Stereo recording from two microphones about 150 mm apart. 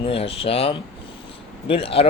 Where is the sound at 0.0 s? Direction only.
40° left (ahead or behind).